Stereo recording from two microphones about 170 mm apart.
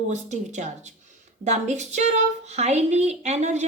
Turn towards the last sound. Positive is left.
turn(degrees=-40)  # may be behind; listen again after turning